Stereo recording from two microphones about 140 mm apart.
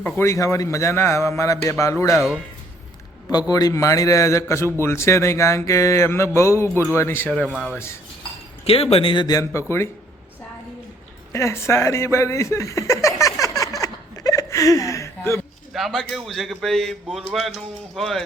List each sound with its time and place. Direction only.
0.0 s a man's voice: 20° left (ahead or behind)
3.5 s a man's voice: 25° left (ahead or behind); by 7.5 s 10° left (ahead or behind)
7.5 s speech: 5° right (ahead or behind)
8.6 s a man's voice: 45° left (ahead or behind); by 9.9 s 20° left (ahead or behind)
11.3 s a man's voice: 20° left (ahead or behind)
13.4 s a sound: 25° left (ahead or behind)
15.7 s a man's voice: centre (ahead or behind)